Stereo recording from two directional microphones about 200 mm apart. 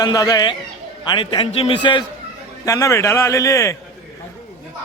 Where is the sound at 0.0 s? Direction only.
20° left (ahead or behind).